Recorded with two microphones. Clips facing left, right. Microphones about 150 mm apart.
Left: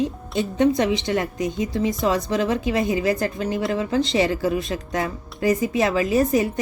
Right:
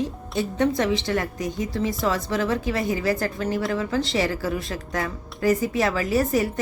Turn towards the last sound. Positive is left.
turn(degrees=20)  # may be behind; listen again after turning